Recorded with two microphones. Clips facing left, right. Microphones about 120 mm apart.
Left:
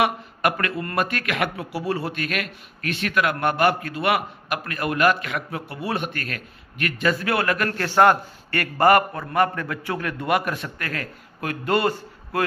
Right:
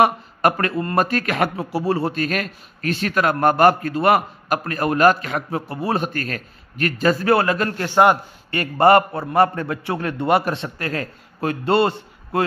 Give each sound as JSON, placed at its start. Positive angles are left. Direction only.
{"t": 0.0, "sound": "a man's voice", "side_deg": -35}